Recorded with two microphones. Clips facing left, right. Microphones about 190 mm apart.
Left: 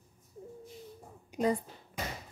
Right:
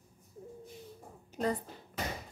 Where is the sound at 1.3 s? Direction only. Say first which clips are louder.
Left 3 dB; 10° left (ahead or behind).